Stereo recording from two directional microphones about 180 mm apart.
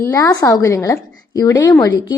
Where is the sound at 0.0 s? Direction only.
20° left (ahead or behind).